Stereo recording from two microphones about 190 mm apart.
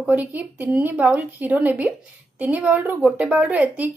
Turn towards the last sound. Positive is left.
turn(degrees=-5)  # may be behind; listen again after turning